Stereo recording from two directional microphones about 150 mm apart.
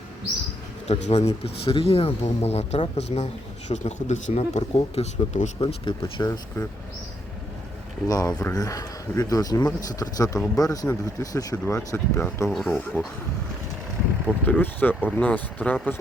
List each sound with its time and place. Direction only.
0.9 s speech: 45° left (ahead or behind)
5.5 s speech: 35° left (ahead or behind)
6.2 s speech: 20° left (ahead or behind)
8.0 s speech: 25° left (ahead or behind)
12.5 s speech: centre (ahead or behind)
14.4 s speech: 10° left (ahead or behind)